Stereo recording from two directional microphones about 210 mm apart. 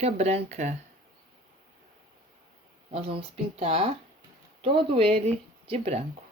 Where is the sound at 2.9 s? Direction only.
30° right (ahead or behind).